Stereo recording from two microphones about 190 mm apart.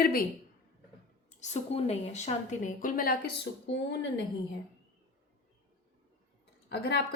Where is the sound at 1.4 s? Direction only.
35° left (ahead or behind); by 3.8 s 65° left (ahead or behind).